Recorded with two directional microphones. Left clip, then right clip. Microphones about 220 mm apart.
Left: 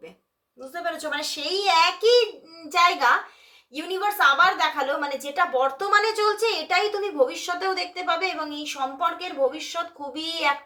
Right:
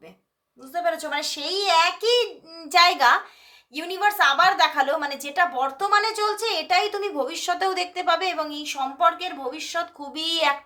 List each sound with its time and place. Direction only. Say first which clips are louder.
0.9 s a woman's voice: right 2 dB; 25° right (ahead or behind)